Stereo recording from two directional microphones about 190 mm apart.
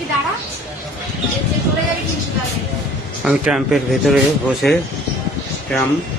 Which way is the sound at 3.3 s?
5° right (ahead or behind).